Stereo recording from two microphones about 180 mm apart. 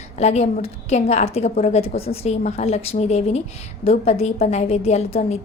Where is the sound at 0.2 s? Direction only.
35° left (ahead or behind).